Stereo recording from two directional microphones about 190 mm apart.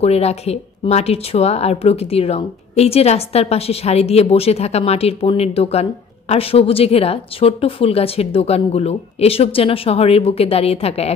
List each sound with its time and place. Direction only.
0.0 s speech: 35° left (ahead or behind)